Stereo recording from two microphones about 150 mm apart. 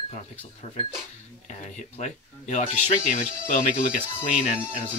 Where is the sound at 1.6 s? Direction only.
50° left (ahead or behind).